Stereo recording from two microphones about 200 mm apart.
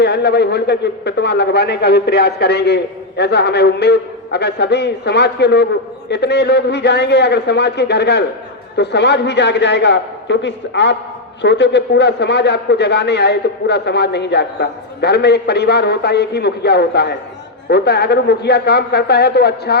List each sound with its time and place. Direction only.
0.0 s a man's voice: 55° left (ahead or behind)